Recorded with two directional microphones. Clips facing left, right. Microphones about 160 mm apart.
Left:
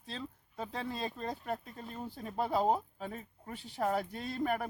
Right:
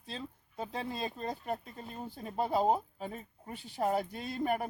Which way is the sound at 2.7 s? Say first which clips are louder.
Right 1 dB; 5° right (ahead or behind).